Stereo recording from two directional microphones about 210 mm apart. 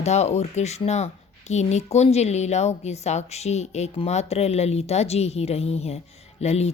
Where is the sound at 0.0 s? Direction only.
30° left (ahead or behind).